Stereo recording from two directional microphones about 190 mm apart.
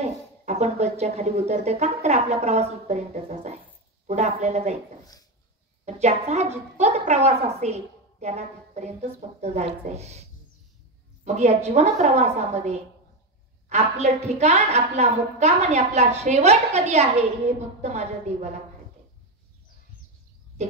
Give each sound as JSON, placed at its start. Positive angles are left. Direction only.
{"t": 0.0, "sound": "a woman's voice", "side_deg": -35}
{"t": 5.9, "sound": "a woman's voice", "side_deg": -35}
{"t": 11.2, "sound": "a woman's voice", "side_deg": -35}